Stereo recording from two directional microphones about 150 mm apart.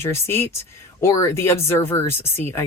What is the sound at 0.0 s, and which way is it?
Speech, 15° left (ahead or behind).